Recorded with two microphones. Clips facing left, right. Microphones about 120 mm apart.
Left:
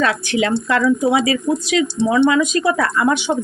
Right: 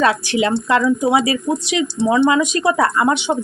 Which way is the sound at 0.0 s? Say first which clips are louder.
Right 2 dB; 25° right (ahead or behind).